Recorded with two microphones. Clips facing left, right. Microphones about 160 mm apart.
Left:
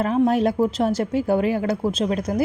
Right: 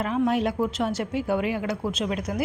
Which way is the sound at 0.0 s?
40° left (ahead or behind).